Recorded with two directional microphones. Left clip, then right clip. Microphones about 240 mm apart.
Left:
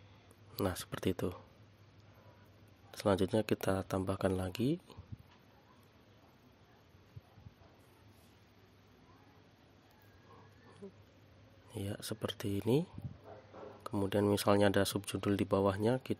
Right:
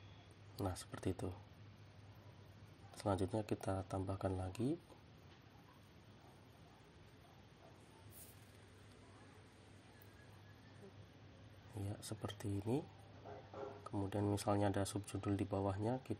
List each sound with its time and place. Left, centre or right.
0.6 s speech: left
2.9 s speech: left
11.8 s speech: left
13.8 s speech: left